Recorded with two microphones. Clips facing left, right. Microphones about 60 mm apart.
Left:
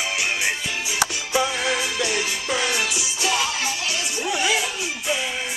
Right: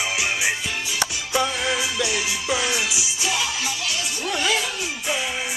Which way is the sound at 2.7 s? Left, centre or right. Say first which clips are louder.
Left 1 dB; left.